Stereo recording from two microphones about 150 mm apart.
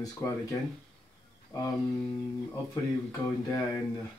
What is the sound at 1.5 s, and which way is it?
Speech, 25° left (ahead or behind).